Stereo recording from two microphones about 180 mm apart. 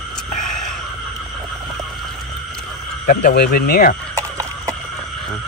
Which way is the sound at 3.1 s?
60° left (ahead or behind).